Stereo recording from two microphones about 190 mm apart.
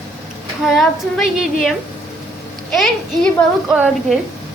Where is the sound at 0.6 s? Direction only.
Centre (ahead or behind).